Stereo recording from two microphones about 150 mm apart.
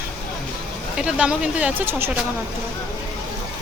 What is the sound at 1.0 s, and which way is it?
Speech, 5° right (ahead or behind).